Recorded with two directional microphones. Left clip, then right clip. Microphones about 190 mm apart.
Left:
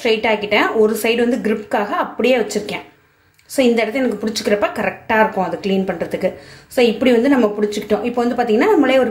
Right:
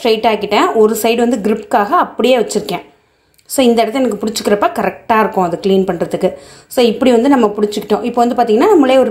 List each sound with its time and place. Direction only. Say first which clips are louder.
0.0 s speech: right 4 dB; 30° right (ahead or behind)